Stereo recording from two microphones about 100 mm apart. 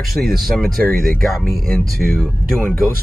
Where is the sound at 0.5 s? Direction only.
10° left (ahead or behind).